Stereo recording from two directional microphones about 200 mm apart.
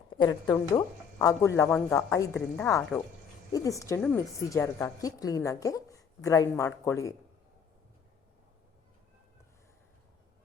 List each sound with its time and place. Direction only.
0.1 s a woman's voice: 20° left (ahead or behind)